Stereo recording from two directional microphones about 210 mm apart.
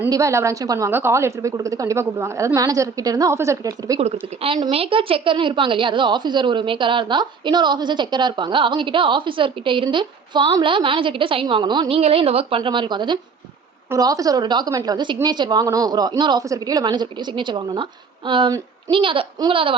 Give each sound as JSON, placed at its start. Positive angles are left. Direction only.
{"t": 0.0, "sound": "a woman's voice", "side_deg": -15}
{"t": 4.0, "sound": "a woman's voice", "side_deg": -30}